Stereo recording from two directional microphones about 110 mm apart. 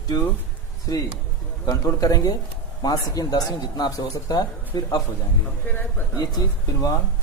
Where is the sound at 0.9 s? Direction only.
35° left (ahead or behind).